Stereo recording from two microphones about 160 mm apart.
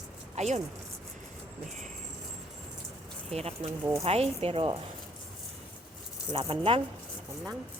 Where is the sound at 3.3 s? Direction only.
40° right (ahead or behind).